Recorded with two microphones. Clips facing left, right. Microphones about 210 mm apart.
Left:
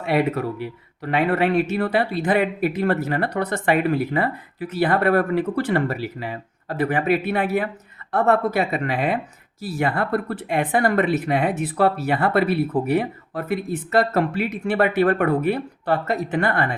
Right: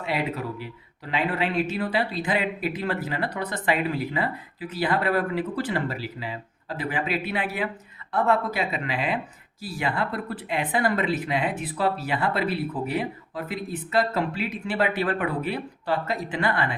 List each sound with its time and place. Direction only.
0.1 s speech: 55° left (ahead or behind)